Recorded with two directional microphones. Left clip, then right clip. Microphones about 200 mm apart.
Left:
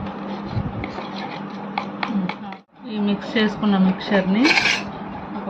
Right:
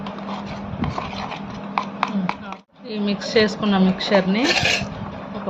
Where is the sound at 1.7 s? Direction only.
Centre (ahead or behind).